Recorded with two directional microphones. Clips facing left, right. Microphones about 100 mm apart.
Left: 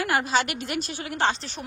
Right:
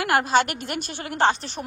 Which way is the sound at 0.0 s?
60° right (ahead or behind).